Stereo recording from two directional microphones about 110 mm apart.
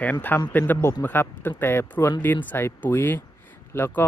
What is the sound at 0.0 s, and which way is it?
Speech, 15° left (ahead or behind).